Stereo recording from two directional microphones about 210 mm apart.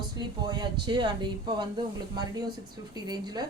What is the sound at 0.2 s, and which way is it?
Speech, 20° right (ahead or behind).